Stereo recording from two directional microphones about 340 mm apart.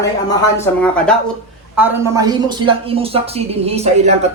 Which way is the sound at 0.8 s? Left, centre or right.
Centre.